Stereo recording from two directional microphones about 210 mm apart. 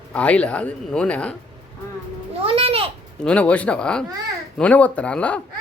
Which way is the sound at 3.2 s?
5° left (ahead or behind).